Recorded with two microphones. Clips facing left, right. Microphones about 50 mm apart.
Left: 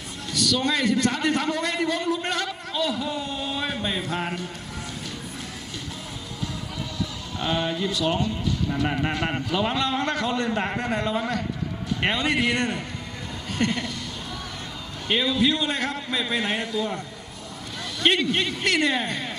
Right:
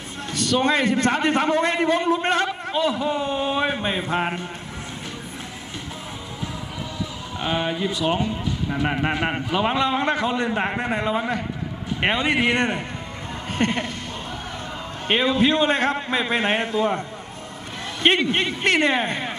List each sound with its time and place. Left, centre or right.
0.3 s a man's voice: right
7.3 s speech: right
15.0 s a man's voice: right
18.0 s a man's voice: right